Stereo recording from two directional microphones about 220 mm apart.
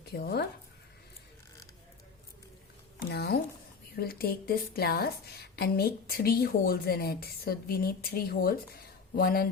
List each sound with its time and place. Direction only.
0.0 s speech: 45° left (ahead or behind)
3.1 s a sound: 45° left (ahead or behind)
3.9 s a woman's voice: 45° left (ahead or behind)